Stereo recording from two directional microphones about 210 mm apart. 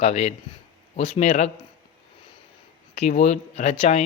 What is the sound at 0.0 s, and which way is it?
Speech, 30° left (ahead or behind).